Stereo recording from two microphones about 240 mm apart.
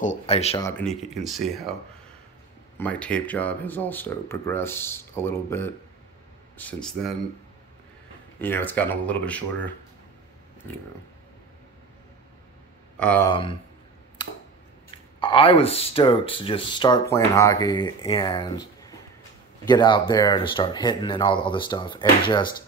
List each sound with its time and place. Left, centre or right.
0.0 s speech: left
0.6 s speech: centre
2.8 s speech: centre
8.4 s speech: centre
13.0 s speech: centre
13.3 s speech: left
14.2 s a sound: centre
15.1 s speech: left